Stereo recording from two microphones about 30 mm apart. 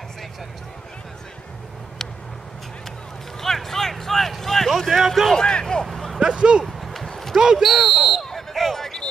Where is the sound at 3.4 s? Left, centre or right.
Centre.